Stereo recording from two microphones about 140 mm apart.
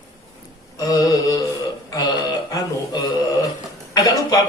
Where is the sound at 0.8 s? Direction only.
25° left (ahead or behind).